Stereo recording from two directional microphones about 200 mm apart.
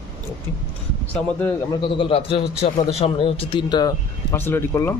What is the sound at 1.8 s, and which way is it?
A man's voice, 25° left (ahead or behind).